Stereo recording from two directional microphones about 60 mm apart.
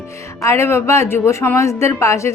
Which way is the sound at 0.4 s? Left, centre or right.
Left.